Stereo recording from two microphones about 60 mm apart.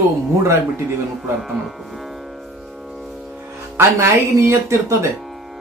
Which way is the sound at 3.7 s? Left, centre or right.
Right.